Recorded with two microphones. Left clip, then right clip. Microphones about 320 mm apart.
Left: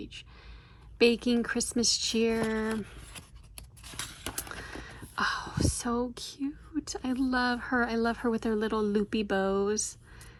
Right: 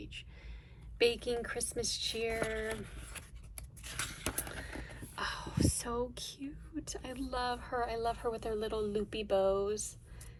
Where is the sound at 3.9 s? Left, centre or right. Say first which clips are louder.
Even; centre.